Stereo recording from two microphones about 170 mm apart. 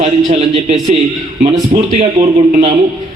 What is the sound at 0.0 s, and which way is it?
A man's voice, 35° right (ahead or behind).